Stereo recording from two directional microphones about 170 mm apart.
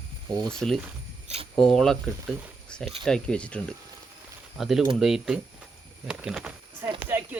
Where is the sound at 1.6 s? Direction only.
5° left (ahead or behind).